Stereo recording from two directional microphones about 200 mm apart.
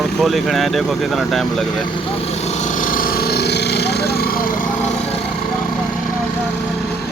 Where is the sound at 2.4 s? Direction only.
35° left (ahead or behind); by 4.3 s 50° left (ahead or behind).